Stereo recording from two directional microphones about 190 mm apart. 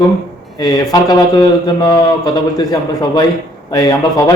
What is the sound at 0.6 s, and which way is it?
Speech, 20° left (ahead or behind).